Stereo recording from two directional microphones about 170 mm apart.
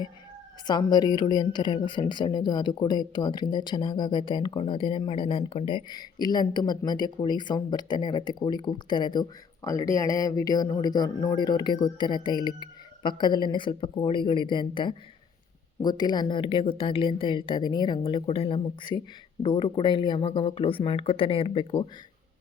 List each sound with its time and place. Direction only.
0.7 s a woman's voice: 25° left (ahead or behind)